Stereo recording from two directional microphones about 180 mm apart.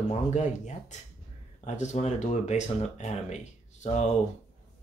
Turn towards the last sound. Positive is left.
turn(degrees=40)  # may be behind; listen again after turning